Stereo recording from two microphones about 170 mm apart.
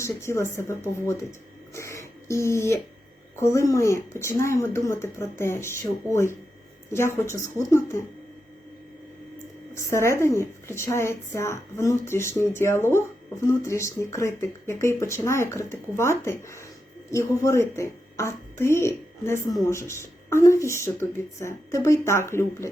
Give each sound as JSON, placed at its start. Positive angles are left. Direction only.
{"t": 0.0, "sound": "a woman's voice", "side_deg": 15}
{"t": 1.7, "sound": "throat clearing", "side_deg": 15}
{"t": 3.4, "sound": "a woman's voice", "side_deg": 15}
{"t": 9.7, "sound": "a woman's voice", "side_deg": 15}